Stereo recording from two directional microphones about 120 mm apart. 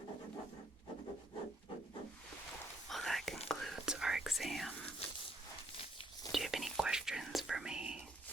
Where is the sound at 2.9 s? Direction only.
Centre (ahead or behind).